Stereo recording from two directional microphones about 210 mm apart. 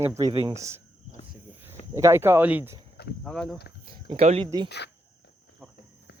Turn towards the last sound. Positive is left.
turn(degrees=-25)  # may be behind; listen again after turning